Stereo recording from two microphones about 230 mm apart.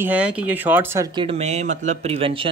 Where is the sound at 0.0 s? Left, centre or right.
Centre.